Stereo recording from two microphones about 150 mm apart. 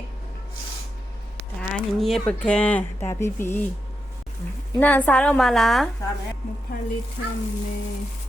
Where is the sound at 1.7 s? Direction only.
Centre (ahead or behind).